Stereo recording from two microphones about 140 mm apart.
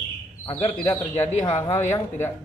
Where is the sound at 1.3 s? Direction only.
50° left (ahead or behind).